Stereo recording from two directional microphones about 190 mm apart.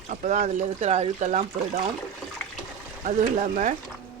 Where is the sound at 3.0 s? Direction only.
40° right (ahead or behind).